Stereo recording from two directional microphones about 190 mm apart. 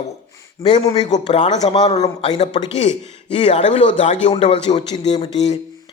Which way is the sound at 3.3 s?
30° left (ahead or behind).